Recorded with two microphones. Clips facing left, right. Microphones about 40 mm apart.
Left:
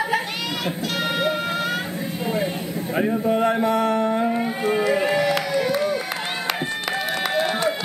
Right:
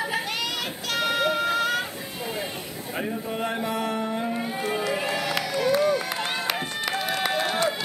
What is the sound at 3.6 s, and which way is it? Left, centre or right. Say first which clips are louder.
Music: left 7 dB; centre.